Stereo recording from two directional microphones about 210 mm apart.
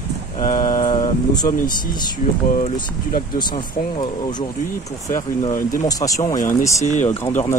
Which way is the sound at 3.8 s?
35° left (ahead or behind).